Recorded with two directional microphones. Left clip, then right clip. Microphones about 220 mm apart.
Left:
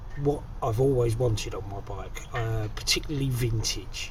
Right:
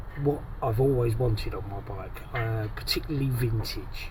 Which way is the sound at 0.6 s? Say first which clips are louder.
Left 1 dB; 5° right (ahead or behind).